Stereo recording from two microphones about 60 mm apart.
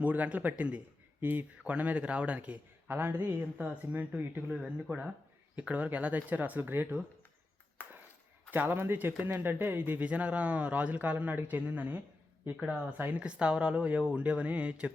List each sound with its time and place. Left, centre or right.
0.0 s speech: right
2.9 s a man's voice: right
7.8 s a sound: left
8.4 s a man's voice: right
13.2 s speech: centre